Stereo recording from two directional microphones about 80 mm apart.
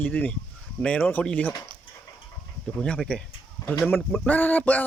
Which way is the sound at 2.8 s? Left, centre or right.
Centre.